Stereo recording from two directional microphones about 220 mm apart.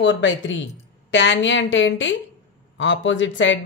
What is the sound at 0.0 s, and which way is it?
A woman's voice, 55° left (ahead or behind).